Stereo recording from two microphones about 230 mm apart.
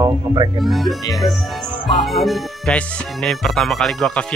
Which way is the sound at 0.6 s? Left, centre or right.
Centre.